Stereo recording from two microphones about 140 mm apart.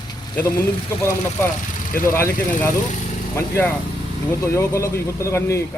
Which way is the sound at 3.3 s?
15° left (ahead or behind).